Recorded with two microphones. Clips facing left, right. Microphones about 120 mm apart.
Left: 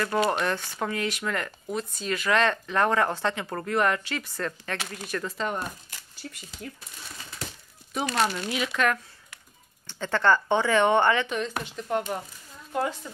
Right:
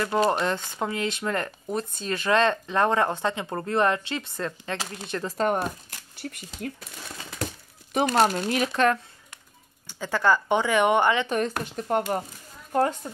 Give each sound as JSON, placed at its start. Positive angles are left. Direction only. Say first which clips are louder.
{"t": 0.3, "sound": "speech", "louder": "right 2 dB", "side_deg": -20}
{"t": 5.4, "sound": "speech", "louder": "right 6 dB", "side_deg": -50}
{"t": 8.1, "sound": "speech", "louder": "right 4 dB", "side_deg": -40}
{"t": 9.8, "sound": "speech", "louder": "even", "side_deg": -10}
{"t": 11.2, "sound": "speech", "louder": "right 4 dB", "side_deg": -50}